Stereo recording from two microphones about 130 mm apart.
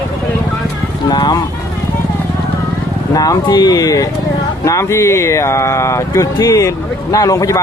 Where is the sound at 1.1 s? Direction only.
35° left (ahead or behind).